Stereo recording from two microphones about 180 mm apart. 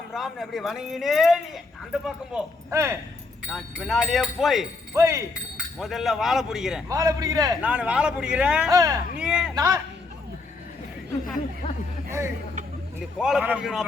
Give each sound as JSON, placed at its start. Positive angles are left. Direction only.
{"t": 0.1, "sound": "speech", "side_deg": 0}
{"t": 2.6, "sound": "speech", "side_deg": -15}
{"t": 3.5, "sound": "speech", "side_deg": 0}
{"t": 4.9, "sound": "speech", "side_deg": -15}
{"t": 6.8, "sound": "a man's voice", "side_deg": -20}
{"t": 7.6, "sound": "speech", "side_deg": -5}
{"t": 8.7, "sound": "speech", "side_deg": -20}
{"t": 9.1, "sound": "speech", "side_deg": -5}
{"t": 9.6, "sound": "speech", "side_deg": -20}
{"t": 13.0, "sound": "speech", "side_deg": 0}